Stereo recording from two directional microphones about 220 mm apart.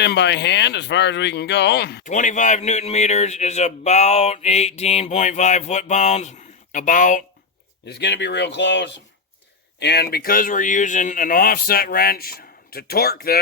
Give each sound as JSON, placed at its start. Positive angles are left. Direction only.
{"t": 0.0, "sound": "speech", "side_deg": 50}
{"t": 2.0, "sound": "speech", "side_deg": 35}
{"t": 7.9, "sound": "speech", "side_deg": 50}